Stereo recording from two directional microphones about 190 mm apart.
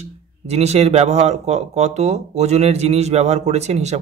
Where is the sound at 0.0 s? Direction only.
35° right (ahead or behind).